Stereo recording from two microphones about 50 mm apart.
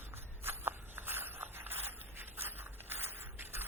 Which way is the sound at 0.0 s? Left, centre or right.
Right.